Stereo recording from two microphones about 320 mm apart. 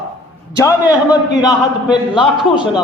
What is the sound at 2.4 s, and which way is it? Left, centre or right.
Speech, centre.